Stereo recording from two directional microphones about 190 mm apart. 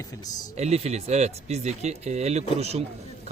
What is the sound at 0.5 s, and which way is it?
Speech, 35° right (ahead or behind).